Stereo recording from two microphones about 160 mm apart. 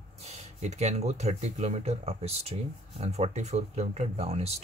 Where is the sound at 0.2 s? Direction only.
45° right (ahead or behind).